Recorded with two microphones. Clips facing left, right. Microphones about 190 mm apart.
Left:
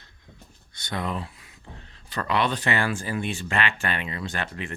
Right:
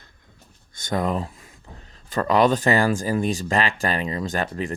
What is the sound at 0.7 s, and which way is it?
Speech, 45° right (ahead or behind).